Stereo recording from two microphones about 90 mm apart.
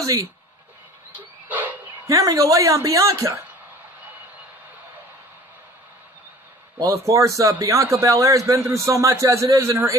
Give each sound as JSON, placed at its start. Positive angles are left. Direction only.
{"t": 0.0, "sound": "speech", "side_deg": -40}
{"t": 1.1, "sound": "vehicle", "side_deg": -20}
{"t": 2.0, "sound": "a man's voice", "side_deg": -35}
{"t": 6.8, "sound": "a man's voice", "side_deg": -35}